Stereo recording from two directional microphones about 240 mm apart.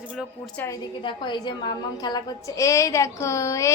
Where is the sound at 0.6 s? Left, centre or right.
Centre.